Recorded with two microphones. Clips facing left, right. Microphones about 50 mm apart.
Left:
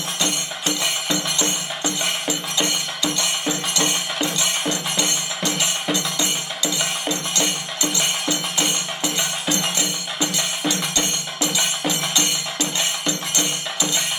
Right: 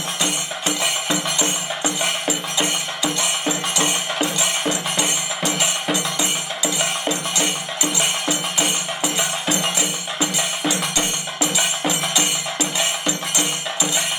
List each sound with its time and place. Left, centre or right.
0.2 s music: centre
11.5 s music: centre